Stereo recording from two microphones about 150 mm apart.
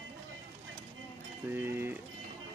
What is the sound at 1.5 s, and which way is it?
Speech, 15° right (ahead or behind).